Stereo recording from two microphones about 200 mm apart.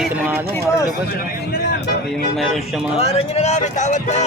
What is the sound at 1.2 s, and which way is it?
Speech, 50° left (ahead or behind).